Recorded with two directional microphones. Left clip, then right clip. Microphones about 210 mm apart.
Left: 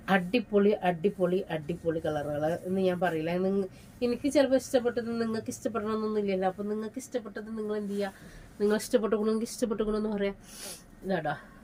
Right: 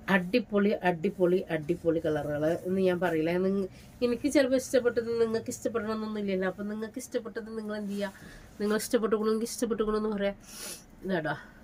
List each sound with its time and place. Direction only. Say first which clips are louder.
0.0 s speech: even; 20° right (ahead or behind)